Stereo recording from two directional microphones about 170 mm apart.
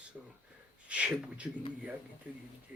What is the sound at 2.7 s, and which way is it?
Speech, 10° right (ahead or behind).